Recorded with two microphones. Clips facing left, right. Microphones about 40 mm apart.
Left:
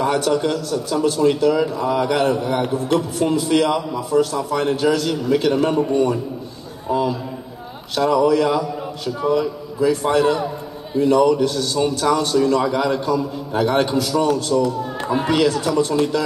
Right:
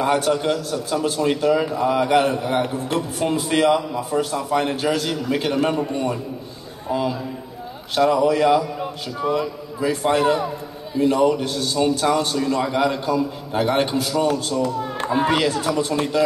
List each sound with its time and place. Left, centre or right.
0.0 s a man's voice: right
6.9 s a man's voice: right
14.6 s a man's voice: right